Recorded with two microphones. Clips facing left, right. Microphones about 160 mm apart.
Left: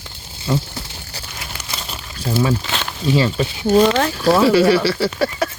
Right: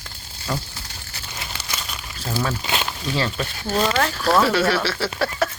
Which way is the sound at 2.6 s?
10° right (ahead or behind).